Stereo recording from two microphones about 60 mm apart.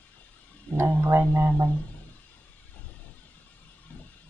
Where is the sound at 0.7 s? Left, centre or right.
Right.